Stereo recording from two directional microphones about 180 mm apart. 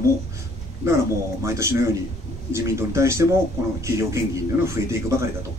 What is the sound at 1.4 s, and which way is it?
A man's voice, 15° right (ahead or behind).